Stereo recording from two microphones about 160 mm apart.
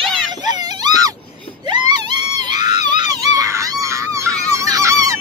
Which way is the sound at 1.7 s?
25° right (ahead or behind).